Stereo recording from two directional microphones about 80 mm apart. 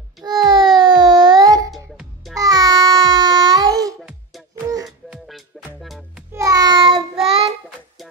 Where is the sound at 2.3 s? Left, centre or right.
Right.